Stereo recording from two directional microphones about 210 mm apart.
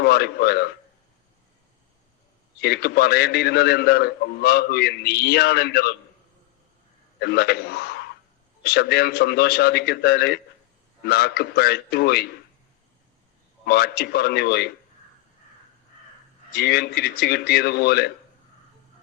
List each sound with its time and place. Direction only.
0.0 s a man's voice: 50° left (ahead or behind)
2.6 s a man's voice: 50° left (ahead or behind)
7.2 s a man's voice: 50° left (ahead or behind)
13.7 s a man's voice: 50° left (ahead or behind)
16.5 s a man's voice: 50° left (ahead or behind)